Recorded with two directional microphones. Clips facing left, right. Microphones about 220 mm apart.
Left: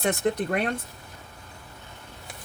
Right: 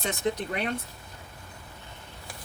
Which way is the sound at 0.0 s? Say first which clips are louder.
Left 4 dB; 60° left (ahead or behind).